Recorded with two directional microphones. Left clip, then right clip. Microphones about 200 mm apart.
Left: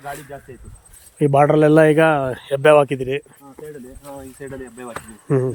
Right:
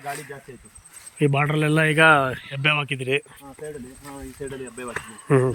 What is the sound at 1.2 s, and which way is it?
A man's voice, 20° left (ahead or behind).